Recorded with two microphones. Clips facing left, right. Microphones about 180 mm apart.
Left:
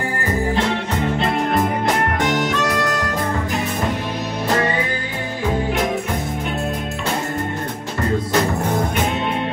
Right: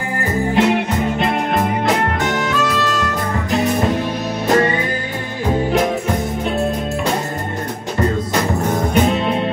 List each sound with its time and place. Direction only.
0.6 s music: 15° right (ahead or behind)